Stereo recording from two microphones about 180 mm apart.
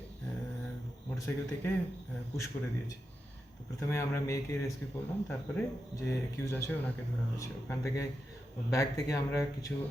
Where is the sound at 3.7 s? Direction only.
15° left (ahead or behind).